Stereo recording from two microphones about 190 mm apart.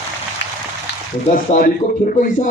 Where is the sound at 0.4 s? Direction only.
65° left (ahead or behind).